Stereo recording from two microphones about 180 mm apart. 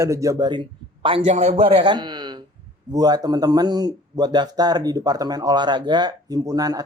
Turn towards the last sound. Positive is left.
turn(degrees=-20)  # may be behind; listen again after turning